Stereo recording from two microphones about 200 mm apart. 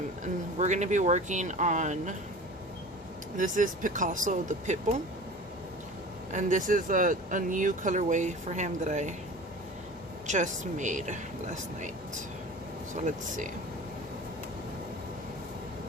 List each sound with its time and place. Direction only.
0.6 s speech: 35° right (ahead or behind)
3.3 s speech: 40° right (ahead or behind)
6.3 s speech: 40° right (ahead or behind)
10.2 s speech: 35° right (ahead or behind)
13.1 s speech: 40° right (ahead or behind)